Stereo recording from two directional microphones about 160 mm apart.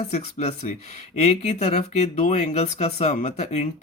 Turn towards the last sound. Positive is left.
turn(degrees=45)  # may be behind; listen again after turning